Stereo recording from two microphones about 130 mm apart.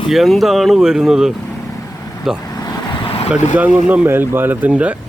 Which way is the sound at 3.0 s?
50° left (ahead or behind).